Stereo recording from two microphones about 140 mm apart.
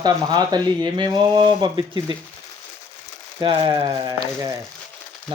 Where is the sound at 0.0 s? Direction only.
30° right (ahead or behind).